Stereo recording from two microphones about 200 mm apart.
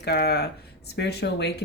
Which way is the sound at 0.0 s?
50° left (ahead or behind).